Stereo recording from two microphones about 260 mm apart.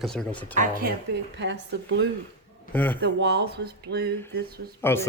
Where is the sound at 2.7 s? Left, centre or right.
Centre.